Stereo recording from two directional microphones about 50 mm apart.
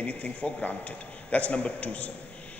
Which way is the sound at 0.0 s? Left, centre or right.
Left.